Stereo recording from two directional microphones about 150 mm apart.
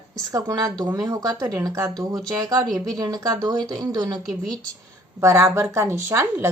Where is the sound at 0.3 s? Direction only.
25° right (ahead or behind).